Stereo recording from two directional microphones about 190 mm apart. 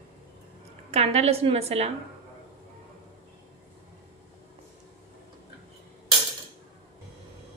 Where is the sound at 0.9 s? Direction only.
35° right (ahead or behind).